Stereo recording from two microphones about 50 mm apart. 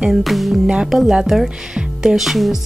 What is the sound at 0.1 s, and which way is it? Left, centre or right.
Speech, centre.